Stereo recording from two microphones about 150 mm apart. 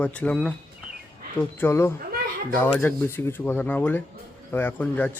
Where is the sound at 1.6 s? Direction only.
15° left (ahead or behind).